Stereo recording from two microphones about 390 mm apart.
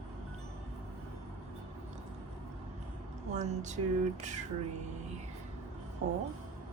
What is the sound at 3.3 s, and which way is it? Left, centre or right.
Speech, centre.